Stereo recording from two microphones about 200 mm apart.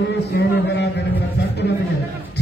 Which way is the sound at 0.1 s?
55° left (ahead or behind).